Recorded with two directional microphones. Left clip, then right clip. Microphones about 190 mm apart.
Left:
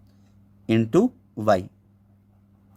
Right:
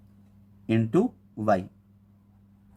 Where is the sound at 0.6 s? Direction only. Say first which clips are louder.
Left 4 dB; 50° left (ahead or behind).